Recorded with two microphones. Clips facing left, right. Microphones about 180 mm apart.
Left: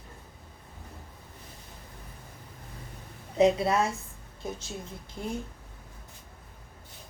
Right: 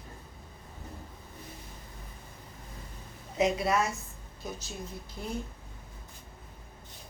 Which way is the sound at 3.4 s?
30° left (ahead or behind).